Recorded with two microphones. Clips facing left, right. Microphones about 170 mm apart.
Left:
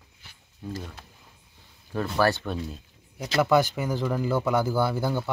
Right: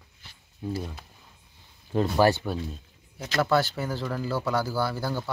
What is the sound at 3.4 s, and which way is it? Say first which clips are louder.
Speech: left 2 dB; 15° left (ahead or behind).